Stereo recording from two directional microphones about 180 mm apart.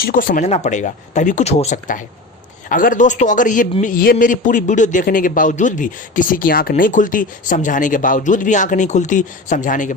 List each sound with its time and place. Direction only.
0.0 s a man's voice: 55° left (ahead or behind)